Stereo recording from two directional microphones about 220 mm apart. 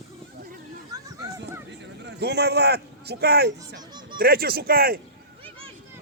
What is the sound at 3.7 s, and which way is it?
Music, 20° right (ahead or behind).